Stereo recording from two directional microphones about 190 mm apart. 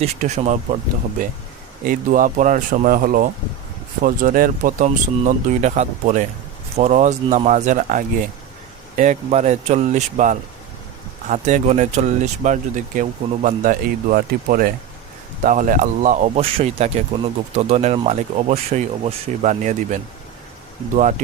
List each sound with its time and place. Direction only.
0.0 s speech: 40° right (ahead or behind)
1.8 s speech: 45° right (ahead or behind)